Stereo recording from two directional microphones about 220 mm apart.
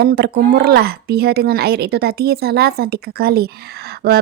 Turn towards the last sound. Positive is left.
turn(degrees=-45)  # may be behind; listen again after turning